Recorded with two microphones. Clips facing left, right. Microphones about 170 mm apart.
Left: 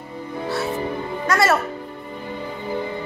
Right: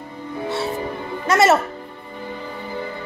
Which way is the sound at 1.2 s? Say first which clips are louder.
Right 4 dB; 25° right (ahead or behind).